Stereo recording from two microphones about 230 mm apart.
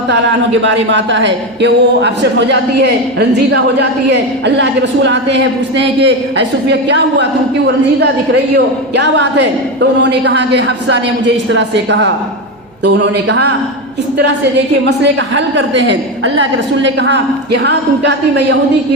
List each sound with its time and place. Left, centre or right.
0.1 s speech: right
14.8 s speech: right